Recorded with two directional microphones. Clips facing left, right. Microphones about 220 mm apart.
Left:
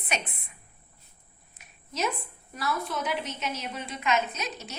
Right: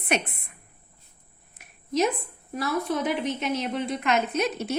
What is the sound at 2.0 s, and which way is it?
A woman's voice, 55° right (ahead or behind).